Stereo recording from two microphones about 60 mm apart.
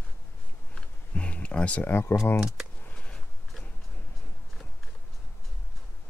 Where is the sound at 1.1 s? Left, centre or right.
Centre.